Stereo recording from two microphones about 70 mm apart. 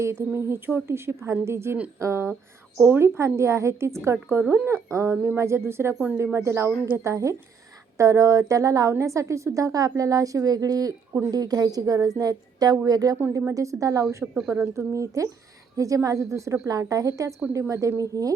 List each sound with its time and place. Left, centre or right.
0.0 s a woman's voice: right
4.4 s speech: right
4.7 s a woman's voice: right
13.5 s a woman's voice: right
16.6 s a woman's voice: right